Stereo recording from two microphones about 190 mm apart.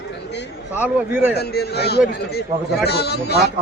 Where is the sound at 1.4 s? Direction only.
60° left (ahead or behind).